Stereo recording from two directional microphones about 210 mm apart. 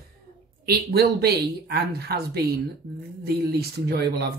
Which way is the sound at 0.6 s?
50° right (ahead or behind).